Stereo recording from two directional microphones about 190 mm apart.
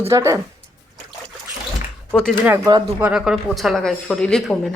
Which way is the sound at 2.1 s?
5° left (ahead or behind).